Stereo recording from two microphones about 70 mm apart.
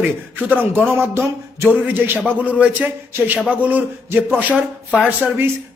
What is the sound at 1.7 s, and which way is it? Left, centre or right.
A man's voice, right.